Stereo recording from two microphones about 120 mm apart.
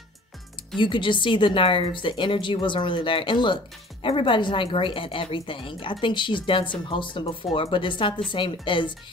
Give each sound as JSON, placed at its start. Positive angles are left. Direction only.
{"t": 0.7, "sound": "a woman's voice", "side_deg": 45}